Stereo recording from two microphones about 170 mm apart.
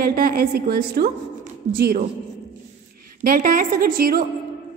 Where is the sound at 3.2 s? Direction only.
55° right (ahead or behind).